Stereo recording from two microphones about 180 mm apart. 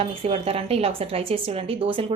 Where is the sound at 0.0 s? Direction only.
30° right (ahead or behind).